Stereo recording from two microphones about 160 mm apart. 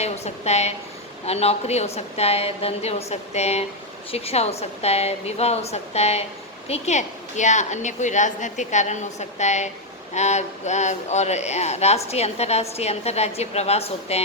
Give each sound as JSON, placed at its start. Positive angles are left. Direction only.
{"t": 0.0, "sound": "a woman's voice", "side_deg": 45}